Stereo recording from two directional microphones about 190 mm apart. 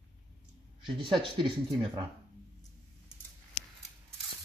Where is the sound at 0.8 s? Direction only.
25° right (ahead or behind).